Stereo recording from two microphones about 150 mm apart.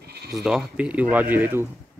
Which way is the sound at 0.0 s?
90° right.